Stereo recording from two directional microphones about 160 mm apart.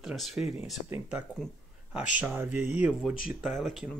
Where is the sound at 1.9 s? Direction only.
5° right (ahead or behind).